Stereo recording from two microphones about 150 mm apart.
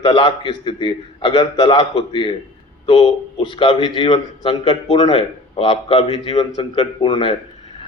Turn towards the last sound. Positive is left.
turn(degrees=30)  # may be behind; listen again after turning